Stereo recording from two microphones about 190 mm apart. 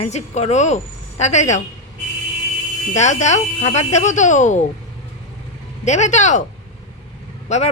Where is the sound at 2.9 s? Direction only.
40° left (ahead or behind).